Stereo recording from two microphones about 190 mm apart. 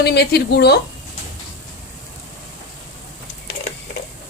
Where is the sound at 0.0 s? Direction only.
60° left (ahead or behind).